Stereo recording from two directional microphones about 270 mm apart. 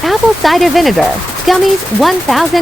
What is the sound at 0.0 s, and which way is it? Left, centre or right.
Speech, centre.